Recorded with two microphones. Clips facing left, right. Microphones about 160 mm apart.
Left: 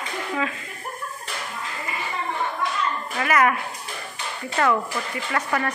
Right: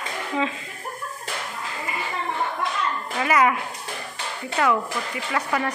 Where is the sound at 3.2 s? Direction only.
15° right (ahead or behind).